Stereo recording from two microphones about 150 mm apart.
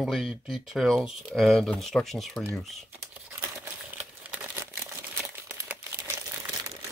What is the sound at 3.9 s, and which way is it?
Crumpling, 10° right (ahead or behind).